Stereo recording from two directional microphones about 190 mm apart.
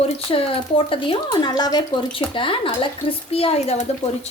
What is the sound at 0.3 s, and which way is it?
Speech, 30° left (ahead or behind).